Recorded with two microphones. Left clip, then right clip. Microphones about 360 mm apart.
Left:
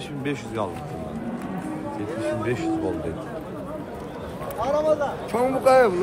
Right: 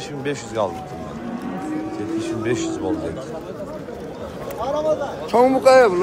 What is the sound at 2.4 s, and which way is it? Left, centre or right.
Speech, centre.